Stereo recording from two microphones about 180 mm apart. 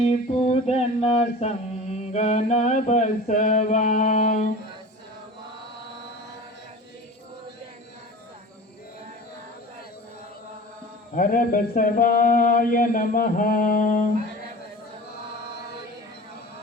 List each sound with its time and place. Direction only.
0.5 s singing: 35° left (ahead or behind)
11.1 s singing: 50° left (ahead or behind)